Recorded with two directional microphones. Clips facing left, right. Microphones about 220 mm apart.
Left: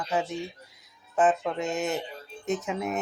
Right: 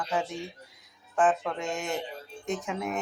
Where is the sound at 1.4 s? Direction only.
5° left (ahead or behind).